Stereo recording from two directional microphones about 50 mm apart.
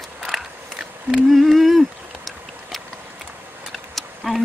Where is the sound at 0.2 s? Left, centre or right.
Centre.